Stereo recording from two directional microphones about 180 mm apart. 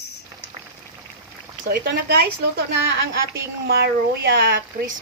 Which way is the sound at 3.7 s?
60° right (ahead or behind).